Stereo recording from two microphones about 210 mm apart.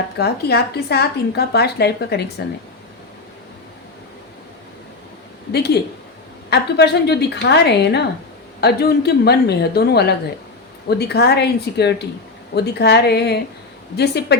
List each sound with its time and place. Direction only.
0.2 s a woman's voice: 50° left (ahead or behind)
5.5 s a woman's voice: 50° left (ahead or behind)